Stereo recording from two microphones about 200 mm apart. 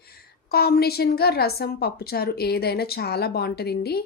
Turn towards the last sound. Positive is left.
turn(degrees=55)  # may be behind; listen again after turning